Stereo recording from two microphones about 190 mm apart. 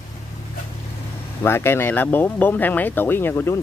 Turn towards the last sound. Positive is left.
turn(degrees=10)  # may be behind; listen again after turning